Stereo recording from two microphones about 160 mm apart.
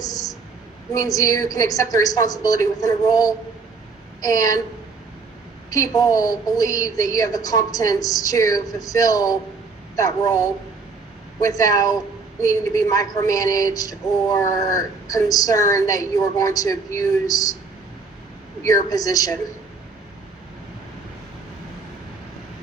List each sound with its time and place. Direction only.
0.0 s a sound: 25° left (ahead or behind)
0.9 s a woman's voice: 20° left (ahead or behind)
5.7 s a woman's voice: 20° left (ahead or behind)
18.6 s a woman's voice: 20° left (ahead or behind)